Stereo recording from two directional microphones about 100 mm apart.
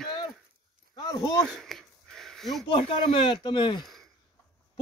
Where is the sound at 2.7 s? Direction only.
60° left (ahead or behind).